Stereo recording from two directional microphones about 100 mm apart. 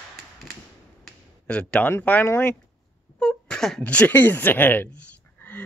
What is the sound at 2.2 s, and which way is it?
Speech, 20° left (ahead or behind).